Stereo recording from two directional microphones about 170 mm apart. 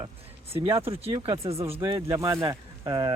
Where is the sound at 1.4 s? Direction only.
35° right (ahead or behind).